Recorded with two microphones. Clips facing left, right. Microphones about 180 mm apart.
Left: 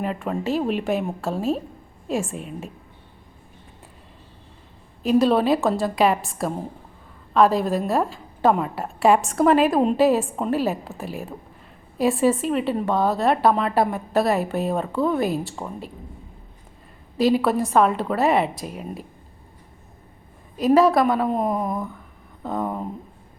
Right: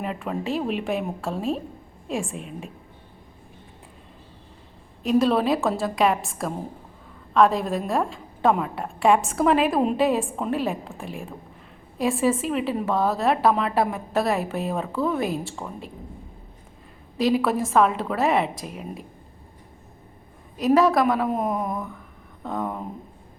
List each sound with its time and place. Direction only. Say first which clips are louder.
0.0 s a woman's voice: left 3 dB; centre (ahead or behind)
5.0 s a woman's voice: left 2 dB; centre (ahead or behind)
17.2 s a woman's voice: left 2 dB; centre (ahead or behind)
20.6 s a woman's voice: left 2 dB; centre (ahead or behind)